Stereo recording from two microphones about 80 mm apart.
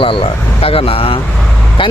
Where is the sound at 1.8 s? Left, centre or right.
Left.